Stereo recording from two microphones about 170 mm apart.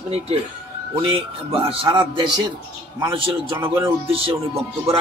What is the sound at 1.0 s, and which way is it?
A man's voice, 30° right (ahead or behind).